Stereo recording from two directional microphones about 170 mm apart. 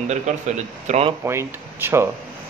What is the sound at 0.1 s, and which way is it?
A man's voice, 45° right (ahead or behind).